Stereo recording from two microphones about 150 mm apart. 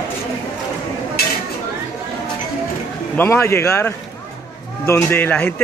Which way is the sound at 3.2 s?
15° left (ahead or behind).